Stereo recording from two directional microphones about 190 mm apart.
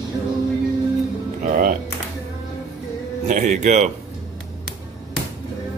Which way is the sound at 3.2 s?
40° right (ahead or behind).